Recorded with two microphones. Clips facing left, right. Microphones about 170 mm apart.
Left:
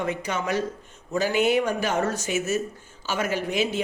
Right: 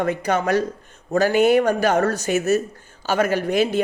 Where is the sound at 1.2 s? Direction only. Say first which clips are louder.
Right 6 dB; 45° right (ahead or behind).